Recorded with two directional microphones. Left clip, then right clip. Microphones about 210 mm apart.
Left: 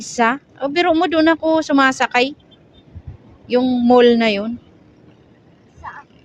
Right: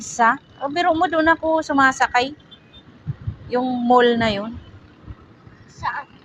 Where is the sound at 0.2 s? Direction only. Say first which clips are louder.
Even; 45° left (ahead or behind).